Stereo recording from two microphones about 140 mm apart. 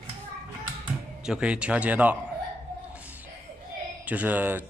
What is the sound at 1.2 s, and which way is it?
Speech, 5° right (ahead or behind).